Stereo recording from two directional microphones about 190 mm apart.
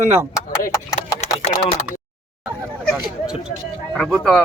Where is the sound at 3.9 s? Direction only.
5° left (ahead or behind).